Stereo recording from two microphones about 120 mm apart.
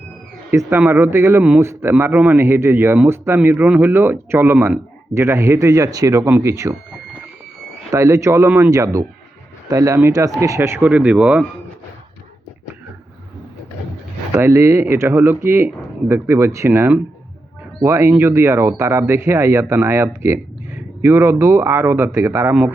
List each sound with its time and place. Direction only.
0.7 s speech: 15° right (ahead or behind)
7.9 s speech: 25° right (ahead or behind)
14.3 s speech: 20° right (ahead or behind)